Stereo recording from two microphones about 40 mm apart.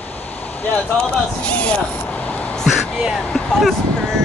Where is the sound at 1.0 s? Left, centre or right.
Left.